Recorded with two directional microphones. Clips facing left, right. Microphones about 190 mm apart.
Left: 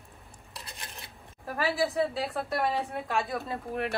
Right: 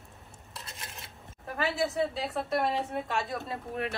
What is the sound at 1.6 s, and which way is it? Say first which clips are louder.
A woman's voice: left 1 dB; centre (ahead or behind).